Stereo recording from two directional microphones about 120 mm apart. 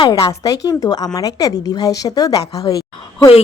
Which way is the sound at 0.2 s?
30° left (ahead or behind).